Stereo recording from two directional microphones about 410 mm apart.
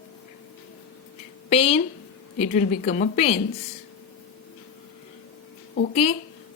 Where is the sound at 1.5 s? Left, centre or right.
Centre.